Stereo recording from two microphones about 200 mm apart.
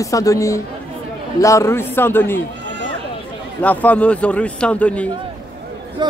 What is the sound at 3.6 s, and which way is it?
A man's voice, 5° left (ahead or behind).